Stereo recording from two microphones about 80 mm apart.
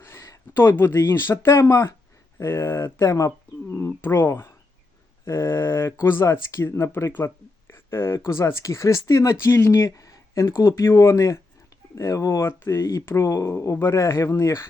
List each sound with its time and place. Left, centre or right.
0.0 s speech: left
3.7 s speech: left